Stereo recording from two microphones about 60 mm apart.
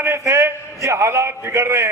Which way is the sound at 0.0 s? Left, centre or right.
Right.